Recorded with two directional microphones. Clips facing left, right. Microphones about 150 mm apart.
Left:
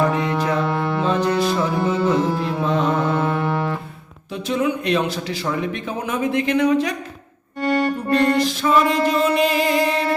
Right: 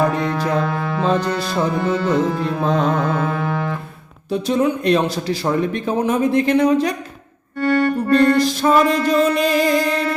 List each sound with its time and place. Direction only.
0.3 s music: centre (ahead or behind)
4.3 s speech: 35° right (ahead or behind)
7.6 s music: 15° left (ahead or behind)
8.4 s speech: 40° right (ahead or behind)
9.8 s music: 25° left (ahead or behind)